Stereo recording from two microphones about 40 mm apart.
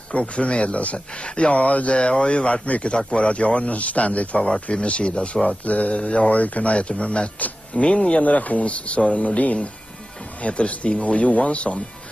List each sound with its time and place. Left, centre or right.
0.1 s speech: left
2.0 s speech: left
5.7 s speech: left